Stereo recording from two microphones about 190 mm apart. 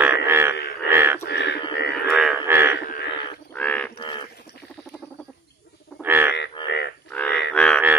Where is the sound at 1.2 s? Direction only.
60° left (ahead or behind).